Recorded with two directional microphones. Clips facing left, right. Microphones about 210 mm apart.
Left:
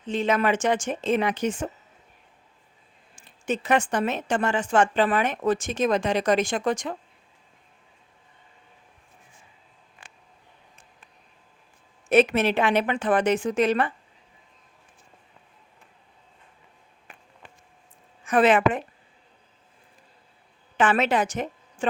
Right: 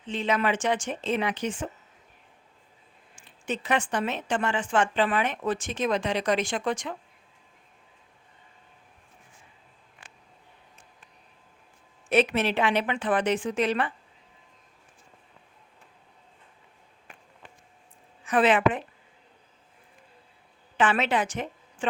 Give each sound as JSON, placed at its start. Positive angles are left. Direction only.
{"t": 0.0, "sound": "speech", "side_deg": 45}
{"t": 3.2, "sound": "speech", "side_deg": 45}
{"t": 12.0, "sound": "speech", "side_deg": 45}
{"t": 18.3, "sound": "speech", "side_deg": 45}
{"t": 20.7, "sound": "a woman's voice", "side_deg": 45}